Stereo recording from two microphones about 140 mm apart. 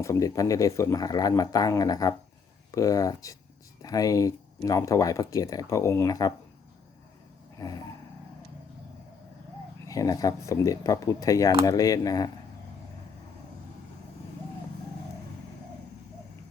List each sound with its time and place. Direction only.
0.0 s speech: 25° left (ahead or behind)
9.8 s speech: 25° left (ahead or behind)